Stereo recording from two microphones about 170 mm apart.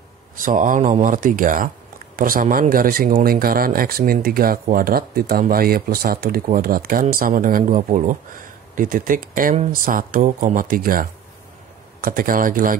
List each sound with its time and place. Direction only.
0.4 s speech: 50° right (ahead or behind)